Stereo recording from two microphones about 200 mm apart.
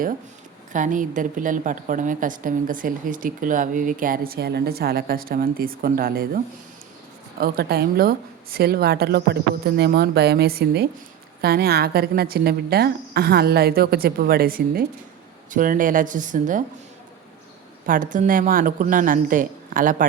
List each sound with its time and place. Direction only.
0.7 s a woman's voice: 40° right (ahead or behind)
17.8 s a woman's voice: 45° right (ahead or behind)